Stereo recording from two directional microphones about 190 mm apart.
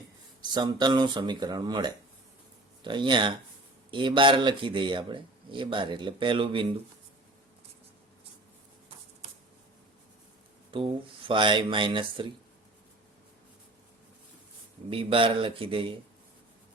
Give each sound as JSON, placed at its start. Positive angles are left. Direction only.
{"t": 0.5, "sound": "speech", "side_deg": -25}
{"t": 10.7, "sound": "speech", "side_deg": -25}
{"t": 14.8, "sound": "speech", "side_deg": -30}